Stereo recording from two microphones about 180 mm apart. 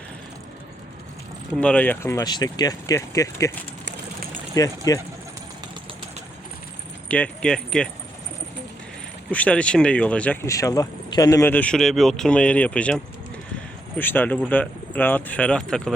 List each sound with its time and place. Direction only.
1.5 s speech: 5° left (ahead or behind)
4.6 s speech: 20° left (ahead or behind)
7.1 s speech: 5° left (ahead or behind)
9.3 s speech: 5° left (ahead or behind)
14.0 s speech: 10° left (ahead or behind)